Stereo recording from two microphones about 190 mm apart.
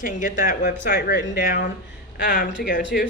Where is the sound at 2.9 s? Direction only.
Centre (ahead or behind).